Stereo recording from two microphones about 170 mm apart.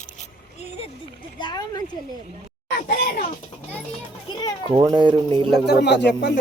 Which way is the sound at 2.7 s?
60° left (ahead or behind).